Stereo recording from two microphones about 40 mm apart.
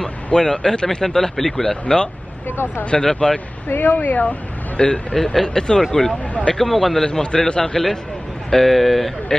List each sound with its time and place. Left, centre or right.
0.0 s a man's voice: centre
3.6 s speech: left
4.0 s speech: left
4.7 s speech: left
5.1 s a man's voice: centre
7.1 s a man's voice: centre
8.5 s speech: centre